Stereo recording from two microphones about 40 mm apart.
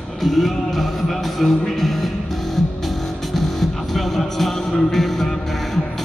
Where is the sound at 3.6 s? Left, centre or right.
Centre.